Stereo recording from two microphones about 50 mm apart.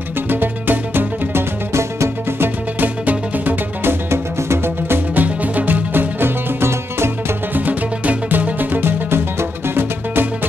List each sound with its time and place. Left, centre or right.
0.3 s music: right
1.7 s music: right
2.8 s music: right
4.1 s music: right
7.5 s music: right
9.1 s music: right